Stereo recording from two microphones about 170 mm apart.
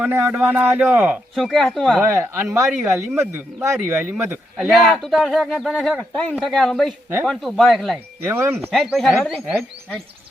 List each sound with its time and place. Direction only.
0.0 s a man's voice: 10° right (ahead or behind)
2.0 s a man's voice: 15° right (ahead or behind)
4.9 s speech: centre (ahead or behind)
8.3 s a man's voice: 15° right (ahead or behind)
8.6 s speech: centre (ahead or behind)